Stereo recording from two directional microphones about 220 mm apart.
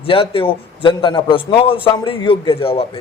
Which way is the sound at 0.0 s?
25° left (ahead or behind).